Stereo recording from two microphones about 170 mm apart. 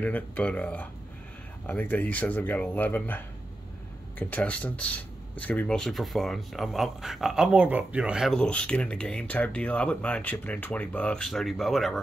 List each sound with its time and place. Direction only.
0.0 s speech: 10° left (ahead or behind)
4.2 s speech: 10° left (ahead or behind)